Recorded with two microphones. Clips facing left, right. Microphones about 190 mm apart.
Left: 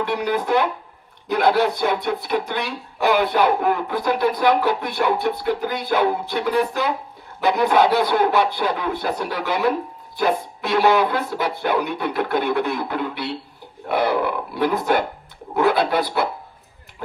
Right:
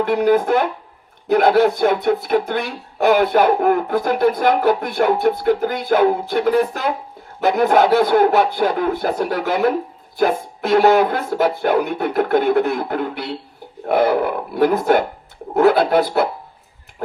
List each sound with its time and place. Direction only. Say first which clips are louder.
0.0 s speech: right 7 dB; 50° right (ahead or behind)